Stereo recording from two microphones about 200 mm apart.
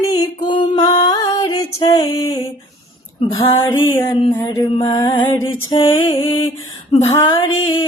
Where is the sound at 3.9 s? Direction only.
25° left (ahead or behind).